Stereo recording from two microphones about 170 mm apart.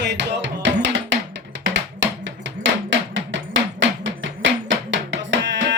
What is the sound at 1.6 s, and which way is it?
Music, 90° right.